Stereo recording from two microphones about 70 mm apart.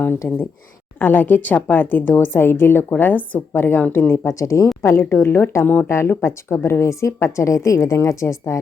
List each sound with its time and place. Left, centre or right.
0.2 s a woman's voice: left
4.3 s a woman's voice: left
4.8 s a woman's voice: left